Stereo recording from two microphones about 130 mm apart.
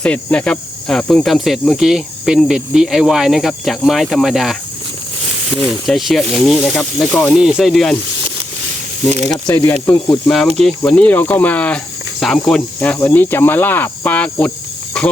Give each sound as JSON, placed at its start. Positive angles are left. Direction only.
{"t": 0.0, "sound": "speech", "side_deg": 10}
{"t": 5.8, "sound": "speech", "side_deg": 0}
{"t": 9.8, "sound": "speech", "side_deg": 25}
{"t": 10.2, "sound": "speech", "side_deg": 5}